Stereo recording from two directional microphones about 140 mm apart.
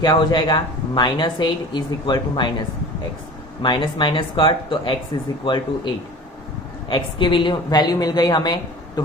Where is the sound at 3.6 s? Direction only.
35° left (ahead or behind).